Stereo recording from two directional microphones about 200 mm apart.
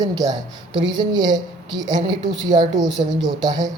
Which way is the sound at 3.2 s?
20° right (ahead or behind).